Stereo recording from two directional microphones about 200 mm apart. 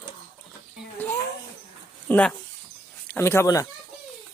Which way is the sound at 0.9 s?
10° left (ahead or behind).